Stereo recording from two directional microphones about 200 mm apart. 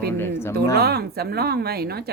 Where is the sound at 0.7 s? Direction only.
50° right (ahead or behind).